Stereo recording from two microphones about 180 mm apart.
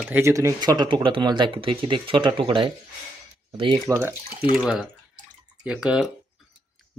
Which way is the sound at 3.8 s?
15° right (ahead or behind).